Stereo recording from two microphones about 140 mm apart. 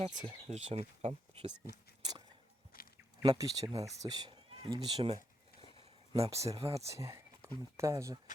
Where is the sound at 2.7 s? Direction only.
90° left.